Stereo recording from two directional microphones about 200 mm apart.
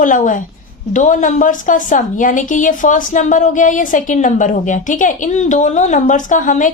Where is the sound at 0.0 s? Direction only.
40° left (ahead or behind).